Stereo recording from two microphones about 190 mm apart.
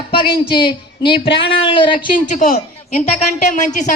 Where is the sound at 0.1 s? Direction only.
25° left (ahead or behind).